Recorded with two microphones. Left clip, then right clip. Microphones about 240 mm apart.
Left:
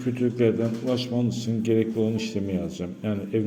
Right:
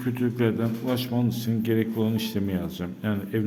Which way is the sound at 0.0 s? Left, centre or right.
Centre.